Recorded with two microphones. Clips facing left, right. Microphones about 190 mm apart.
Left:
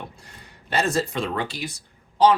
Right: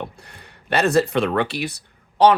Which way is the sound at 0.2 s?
65° right (ahead or behind).